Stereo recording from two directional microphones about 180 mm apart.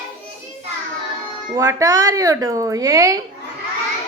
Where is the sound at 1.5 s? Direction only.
20° right (ahead or behind).